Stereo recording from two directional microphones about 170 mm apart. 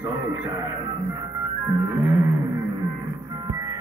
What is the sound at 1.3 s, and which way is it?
Music, 20° right (ahead or behind).